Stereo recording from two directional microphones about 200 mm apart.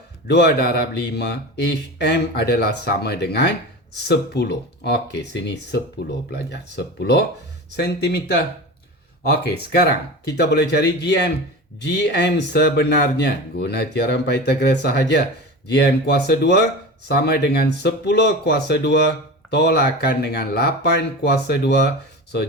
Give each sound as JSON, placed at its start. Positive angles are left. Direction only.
{"t": 0.3, "sound": "speech", "side_deg": 55}
{"t": 9.7, "sound": "speech", "side_deg": 55}